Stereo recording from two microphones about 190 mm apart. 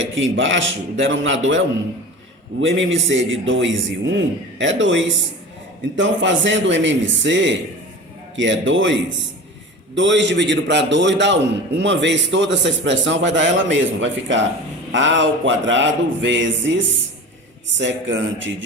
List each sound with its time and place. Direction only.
0.0 s a man's voice: 90° right